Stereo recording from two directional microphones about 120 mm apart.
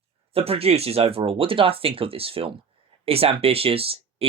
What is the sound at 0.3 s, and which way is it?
Speech, 55° right (ahead or behind).